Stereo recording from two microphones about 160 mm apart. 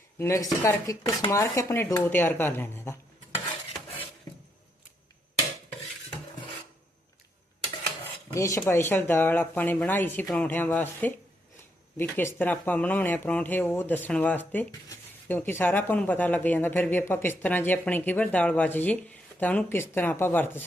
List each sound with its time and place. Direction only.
0.2 s speech: 20° left (ahead or behind)
8.3 s speech: 20° left (ahead or behind)
14.7 s dishes: 20° left (ahead or behind)
15.4 s speech: 10° left (ahead or behind)